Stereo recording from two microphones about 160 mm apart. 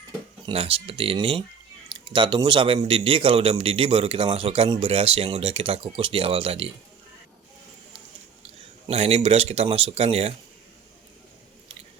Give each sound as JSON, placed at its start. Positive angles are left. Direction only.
{"t": 0.4, "sound": "a man's voice", "side_deg": -35}
{"t": 8.4, "sound": "speech", "side_deg": -40}